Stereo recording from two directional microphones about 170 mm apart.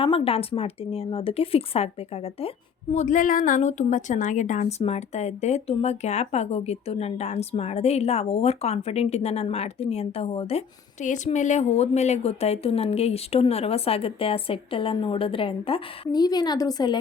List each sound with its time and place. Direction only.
0.0 s a woman's voice: 35° left (ahead or behind)
2.9 s a woman's voice: 45° left (ahead or behind)
11.0 s a woman's voice: 45° left (ahead or behind); by 17.0 s 25° left (ahead or behind)